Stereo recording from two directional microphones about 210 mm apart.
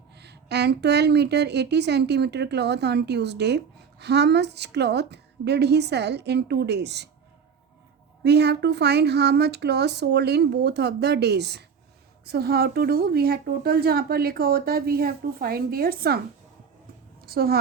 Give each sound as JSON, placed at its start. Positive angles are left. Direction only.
{"t": 0.2, "sound": "speech", "side_deg": -55}
{"t": 8.2, "sound": "a woman's voice", "side_deg": -55}